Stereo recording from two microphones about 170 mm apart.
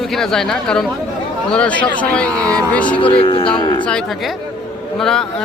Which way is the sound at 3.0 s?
30° left (ahead or behind).